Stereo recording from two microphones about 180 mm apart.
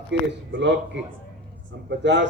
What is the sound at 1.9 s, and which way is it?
Speech, 85° right.